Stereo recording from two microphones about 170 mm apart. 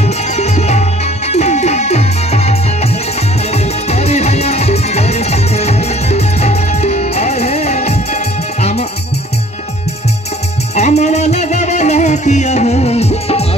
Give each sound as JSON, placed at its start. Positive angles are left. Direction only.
{"t": 0.0, "sound": "music", "side_deg": 40}
{"t": 10.8, "sound": "music", "side_deg": 40}